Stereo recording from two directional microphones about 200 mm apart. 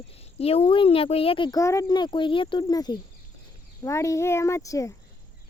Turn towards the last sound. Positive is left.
turn(degrees=15)  # may be behind; listen again after turning